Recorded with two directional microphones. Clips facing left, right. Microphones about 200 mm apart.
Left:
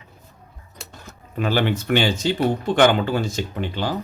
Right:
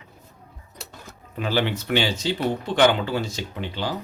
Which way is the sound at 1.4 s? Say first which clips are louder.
Left 3 dB; 50° left (ahead or behind).